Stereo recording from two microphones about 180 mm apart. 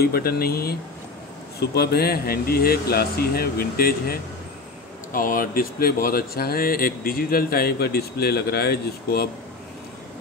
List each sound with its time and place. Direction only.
0.0 s speech: 55° left (ahead or behind)